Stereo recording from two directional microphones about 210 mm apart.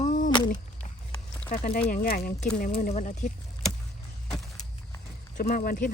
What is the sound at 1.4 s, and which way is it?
Speech, 30° left (ahead or behind).